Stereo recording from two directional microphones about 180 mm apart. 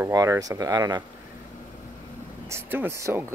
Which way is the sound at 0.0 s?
15° right (ahead or behind).